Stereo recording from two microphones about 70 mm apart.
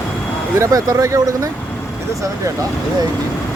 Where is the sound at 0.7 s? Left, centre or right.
Right.